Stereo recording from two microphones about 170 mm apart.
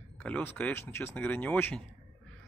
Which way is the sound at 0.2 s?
10° left (ahead or behind).